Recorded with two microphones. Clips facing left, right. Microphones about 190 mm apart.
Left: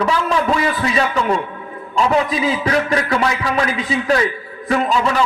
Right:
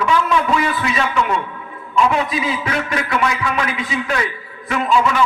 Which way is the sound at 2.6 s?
35° left (ahead or behind).